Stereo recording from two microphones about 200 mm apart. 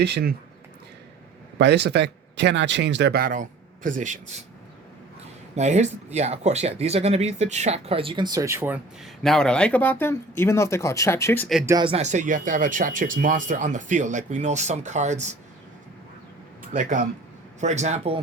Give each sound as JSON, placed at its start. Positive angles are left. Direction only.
{"t": 0.0, "sound": "speech", "side_deg": -55}
{"t": 1.5, "sound": "speech", "side_deg": -60}
{"t": 5.5, "sound": "speech", "side_deg": -35}
{"t": 9.2, "sound": "speech", "side_deg": 0}
{"t": 11.6, "sound": "speech", "side_deg": -20}
{"t": 17.6, "sound": "speech", "side_deg": -35}